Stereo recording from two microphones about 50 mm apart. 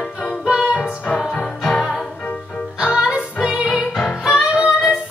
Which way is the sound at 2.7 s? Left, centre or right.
Centre.